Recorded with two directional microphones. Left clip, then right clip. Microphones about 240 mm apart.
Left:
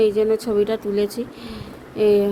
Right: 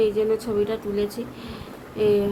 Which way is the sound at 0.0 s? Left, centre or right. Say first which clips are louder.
Left 4 dB; left.